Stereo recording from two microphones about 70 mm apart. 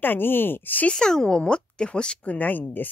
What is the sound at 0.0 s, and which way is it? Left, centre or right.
Speech, left.